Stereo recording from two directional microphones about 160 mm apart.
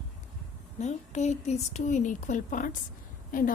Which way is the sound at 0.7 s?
45° left (ahead or behind).